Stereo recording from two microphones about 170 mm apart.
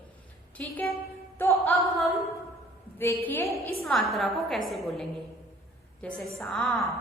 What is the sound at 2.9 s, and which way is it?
Speech, 15° left (ahead or behind).